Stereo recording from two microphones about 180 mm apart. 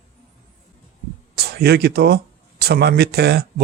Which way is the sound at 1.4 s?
65° right (ahead or behind).